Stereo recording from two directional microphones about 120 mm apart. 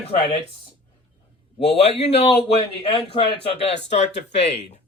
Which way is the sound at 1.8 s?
60° left (ahead or behind).